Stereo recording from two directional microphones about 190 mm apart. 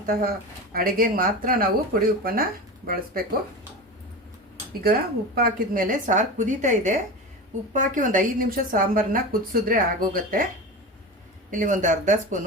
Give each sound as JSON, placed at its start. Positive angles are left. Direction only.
{"t": 0.0, "sound": "speech", "side_deg": -50}
{"t": 4.8, "sound": "speech", "side_deg": -50}
{"t": 11.5, "sound": "speech", "side_deg": -40}